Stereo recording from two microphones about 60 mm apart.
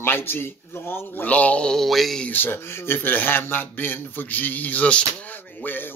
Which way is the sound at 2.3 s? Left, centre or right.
Left.